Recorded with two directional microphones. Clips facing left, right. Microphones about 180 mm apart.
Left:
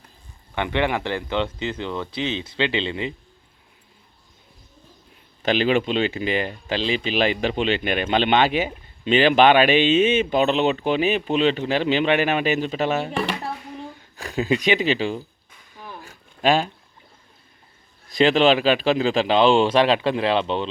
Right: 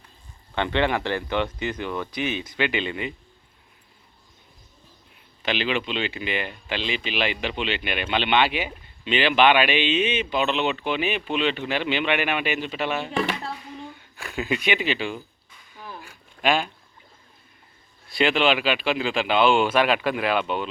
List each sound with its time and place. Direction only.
0.5 s speech: 15° left (ahead or behind)
5.4 s speech: 45° left (ahead or behind)
14.2 s speech: 35° left (ahead or behind)
16.0 s a sound: 35° left (ahead or behind)
18.1 s speech: 40° left (ahead or behind)